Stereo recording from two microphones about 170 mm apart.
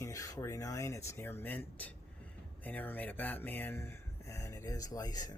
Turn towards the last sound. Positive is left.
turn(degrees=20)  # may be behind; listen again after turning